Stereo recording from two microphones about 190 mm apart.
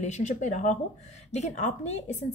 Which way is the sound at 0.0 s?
40° left (ahead or behind).